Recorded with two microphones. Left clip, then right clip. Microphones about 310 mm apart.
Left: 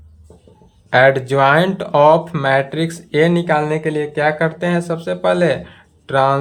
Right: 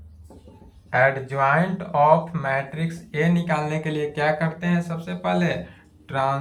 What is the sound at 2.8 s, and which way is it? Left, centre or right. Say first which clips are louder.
Speech: left 10 dB; centre.